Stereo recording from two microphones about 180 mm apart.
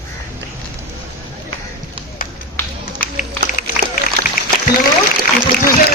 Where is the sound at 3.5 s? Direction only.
45° left (ahead or behind).